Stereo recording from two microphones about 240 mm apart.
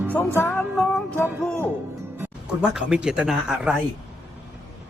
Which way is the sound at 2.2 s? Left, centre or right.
Centre.